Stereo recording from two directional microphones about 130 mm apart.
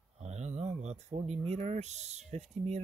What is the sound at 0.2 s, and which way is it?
Speech, 60° right (ahead or behind).